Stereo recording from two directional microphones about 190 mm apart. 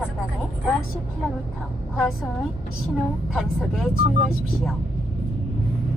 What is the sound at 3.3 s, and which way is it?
Speech, centre (ahead or behind).